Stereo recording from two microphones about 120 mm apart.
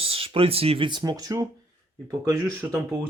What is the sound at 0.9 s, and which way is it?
Speech, 35° right (ahead or behind).